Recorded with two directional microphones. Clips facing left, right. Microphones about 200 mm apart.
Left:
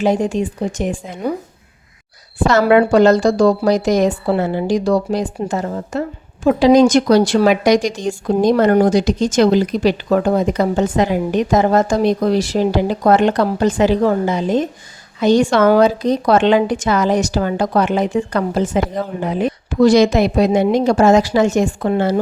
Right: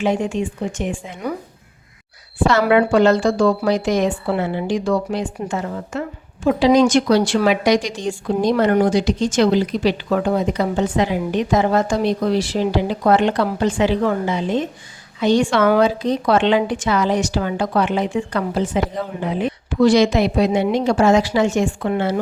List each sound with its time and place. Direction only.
0.0 s speech: 40° left (ahead or behind)
2.5 s a woman's voice: 45° left (ahead or behind)